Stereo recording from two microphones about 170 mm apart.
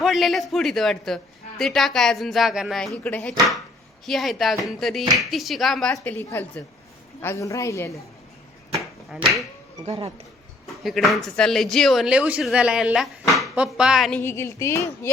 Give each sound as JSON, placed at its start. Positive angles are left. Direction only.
{"t": 0.0, "sound": "a woman's voice", "side_deg": 0}
{"t": 5.9, "sound": "speech", "side_deg": 15}
{"t": 8.7, "sound": "a sound", "side_deg": 0}
{"t": 9.8, "sound": "speech", "side_deg": -40}
{"t": 10.8, "sound": "a woman's voice", "side_deg": 0}
{"t": 14.2, "sound": "speech", "side_deg": 15}